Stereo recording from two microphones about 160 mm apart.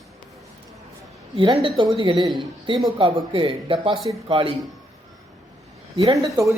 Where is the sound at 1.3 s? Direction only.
30° right (ahead or behind).